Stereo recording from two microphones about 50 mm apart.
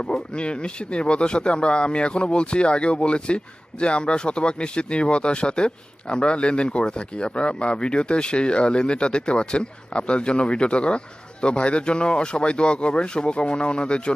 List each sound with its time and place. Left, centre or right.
0.0 s speech: left